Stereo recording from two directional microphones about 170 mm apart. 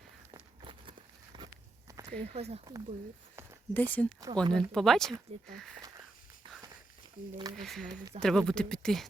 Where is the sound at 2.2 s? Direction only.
40° right (ahead or behind).